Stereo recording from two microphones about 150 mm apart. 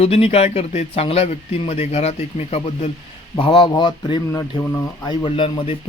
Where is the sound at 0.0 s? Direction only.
40° left (ahead or behind).